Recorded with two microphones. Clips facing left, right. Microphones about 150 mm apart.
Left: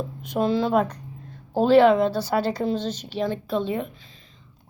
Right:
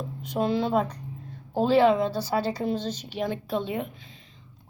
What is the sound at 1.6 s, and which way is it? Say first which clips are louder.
Speech: left 4 dB; 75° left (ahead or behind).